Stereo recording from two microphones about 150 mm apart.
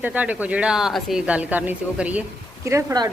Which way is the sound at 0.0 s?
10° right (ahead or behind).